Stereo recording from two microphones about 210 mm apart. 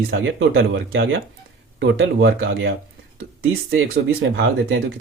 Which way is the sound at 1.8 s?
55° right (ahead or behind).